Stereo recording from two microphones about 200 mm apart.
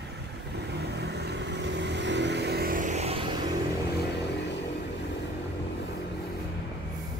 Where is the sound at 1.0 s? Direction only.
55° right (ahead or behind); by 3.1 s 35° right (ahead or behind).